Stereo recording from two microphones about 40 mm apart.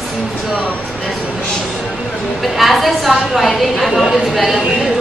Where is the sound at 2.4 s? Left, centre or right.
Centre.